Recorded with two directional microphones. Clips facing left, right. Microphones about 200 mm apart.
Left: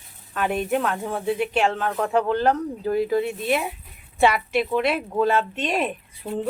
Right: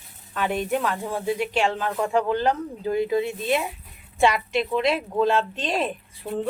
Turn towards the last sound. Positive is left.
turn(degrees=5)  # may be behind; listen again after turning